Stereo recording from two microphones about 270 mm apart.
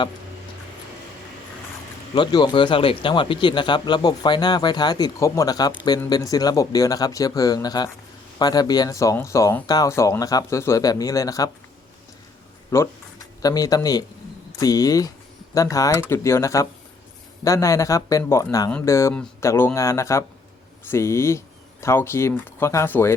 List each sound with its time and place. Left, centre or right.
2.1 s speech: centre
12.7 s speech: centre